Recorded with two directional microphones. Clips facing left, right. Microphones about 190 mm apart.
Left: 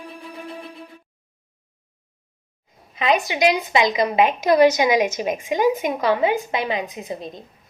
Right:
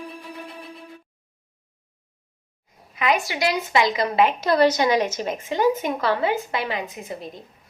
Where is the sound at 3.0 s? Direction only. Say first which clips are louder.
Left 3 dB; 20° left (ahead or behind).